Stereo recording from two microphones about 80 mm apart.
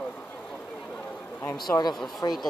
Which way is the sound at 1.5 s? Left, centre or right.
Left.